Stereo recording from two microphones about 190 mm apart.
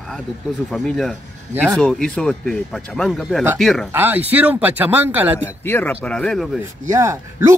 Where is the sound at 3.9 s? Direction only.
10° right (ahead or behind).